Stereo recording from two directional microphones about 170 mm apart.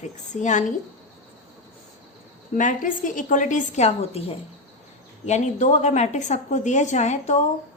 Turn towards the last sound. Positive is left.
turn(degrees=40)  # may be behind; listen again after turning